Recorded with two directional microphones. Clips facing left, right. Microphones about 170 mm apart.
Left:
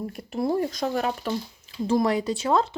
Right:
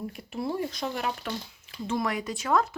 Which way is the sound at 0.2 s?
40° left (ahead or behind).